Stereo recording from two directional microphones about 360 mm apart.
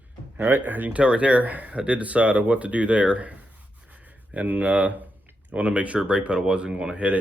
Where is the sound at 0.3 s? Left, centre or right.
Centre.